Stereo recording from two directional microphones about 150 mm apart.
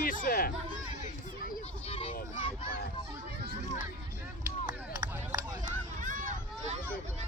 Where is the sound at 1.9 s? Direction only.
40° left (ahead or behind).